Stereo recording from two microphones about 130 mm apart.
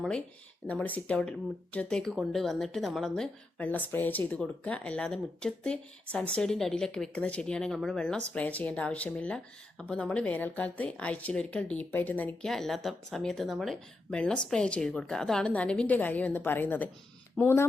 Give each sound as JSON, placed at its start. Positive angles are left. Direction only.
{"t": 0.7, "sound": "a woman's voice", "side_deg": 10}
{"t": 12.5, "sound": "a woman's voice", "side_deg": 5}